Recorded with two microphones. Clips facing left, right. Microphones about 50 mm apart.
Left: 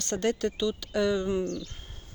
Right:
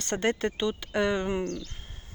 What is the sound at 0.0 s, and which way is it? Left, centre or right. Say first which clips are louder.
Speech: even; right.